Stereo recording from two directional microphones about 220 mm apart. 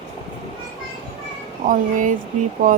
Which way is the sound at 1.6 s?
40° right (ahead or behind).